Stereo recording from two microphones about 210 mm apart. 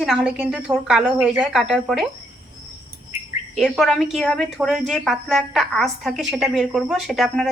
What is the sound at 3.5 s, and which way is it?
Speech, centre (ahead or behind).